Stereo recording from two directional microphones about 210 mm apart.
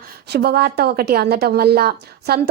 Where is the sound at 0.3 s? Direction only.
50° right (ahead or behind).